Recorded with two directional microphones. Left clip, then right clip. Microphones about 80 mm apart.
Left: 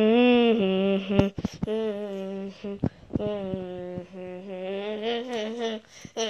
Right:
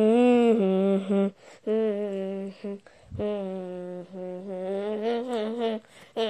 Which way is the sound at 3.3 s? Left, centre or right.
Centre.